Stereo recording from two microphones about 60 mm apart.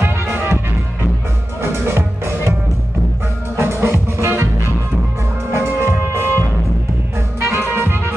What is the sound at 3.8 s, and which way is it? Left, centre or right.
Music, right.